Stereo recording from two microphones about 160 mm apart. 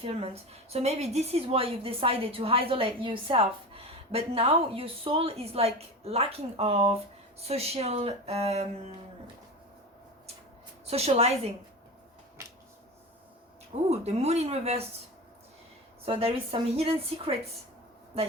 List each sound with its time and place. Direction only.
0.0 s a woman's voice: 40° right (ahead or behind)
10.8 s a woman's voice: 40° right (ahead or behind)
13.9 s a woman's voice: 40° right (ahead or behind)
16.0 s a woman's voice: 35° right (ahead or behind)